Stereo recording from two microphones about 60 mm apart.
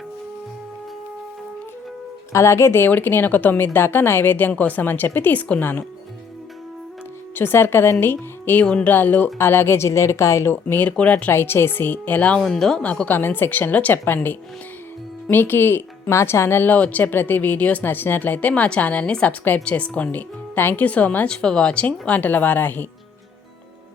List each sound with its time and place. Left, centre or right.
2.3 s a woman's voice: left
7.3 s a woman's voice: left
8.6 s a woman's voice: centre
8.9 s speech: left
10.5 s a woman's voice: left
11.3 s a woman's voice: left
12.4 s speech: centre
12.8 s a woman's voice: left
13.1 s a woman's voice: left
13.9 s a woman's voice: left
16.7 s a woman's voice: left
21.2 s a woman's voice: centre; by 22.9 s left